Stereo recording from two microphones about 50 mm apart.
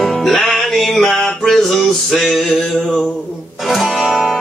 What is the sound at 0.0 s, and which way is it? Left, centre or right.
Music, centre.